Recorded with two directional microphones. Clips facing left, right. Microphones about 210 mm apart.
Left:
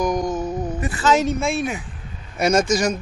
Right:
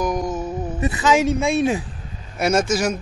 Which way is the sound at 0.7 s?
20° right (ahead or behind).